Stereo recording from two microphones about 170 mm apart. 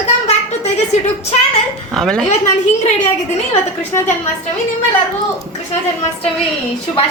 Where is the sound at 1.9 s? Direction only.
Centre (ahead or behind).